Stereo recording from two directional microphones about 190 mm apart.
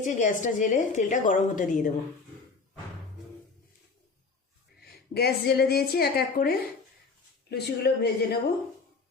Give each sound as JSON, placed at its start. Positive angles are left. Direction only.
{"t": 0.0, "sound": "a woman's voice", "side_deg": 40}
{"t": 5.1, "sound": "a woman's voice", "side_deg": 55}